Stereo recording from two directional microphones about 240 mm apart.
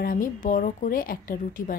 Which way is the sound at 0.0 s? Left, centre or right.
Left.